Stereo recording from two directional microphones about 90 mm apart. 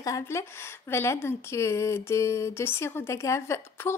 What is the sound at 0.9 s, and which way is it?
Speech, 30° left (ahead or behind).